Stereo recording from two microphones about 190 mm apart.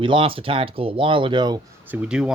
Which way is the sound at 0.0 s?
25° right (ahead or behind).